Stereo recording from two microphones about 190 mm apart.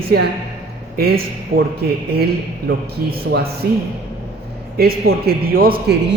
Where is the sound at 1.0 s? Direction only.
55° right (ahead or behind).